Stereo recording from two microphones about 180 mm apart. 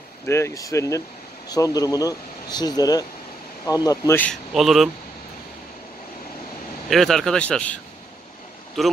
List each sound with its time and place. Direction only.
0.3 s speech: 15° left (ahead or behind)
4.6 s speech: centre (ahead or behind)
6.9 s speech: centre (ahead or behind)